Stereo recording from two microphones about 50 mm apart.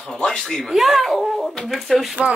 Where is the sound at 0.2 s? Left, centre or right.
Centre.